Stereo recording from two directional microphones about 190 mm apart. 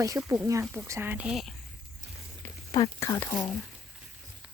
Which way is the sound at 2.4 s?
10° left (ahead or behind).